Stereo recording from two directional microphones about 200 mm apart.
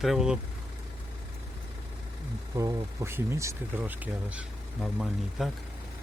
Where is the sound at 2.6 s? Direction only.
15° right (ahead or behind).